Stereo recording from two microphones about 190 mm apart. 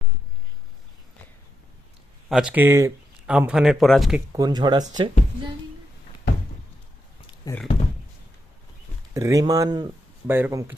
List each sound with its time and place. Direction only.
2.3 s speech: 5° right (ahead or behind)
4.3 s speech: 20° right (ahead or behind)
7.5 s speech: 20° left (ahead or behind)
9.1 s speech: 15° right (ahead or behind)